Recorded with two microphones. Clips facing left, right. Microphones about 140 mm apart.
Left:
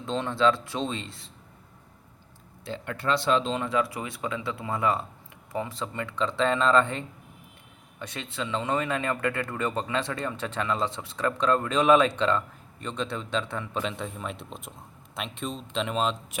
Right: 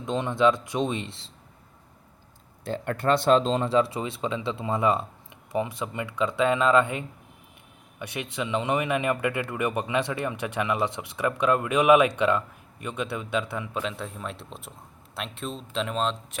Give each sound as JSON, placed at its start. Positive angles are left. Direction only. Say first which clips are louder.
{"t": 0.0, "sound": "speech", "louder": "right 2 dB", "side_deg": -15}
{"t": 2.6, "sound": "a man's voice", "louder": "right 4 dB", "side_deg": -50}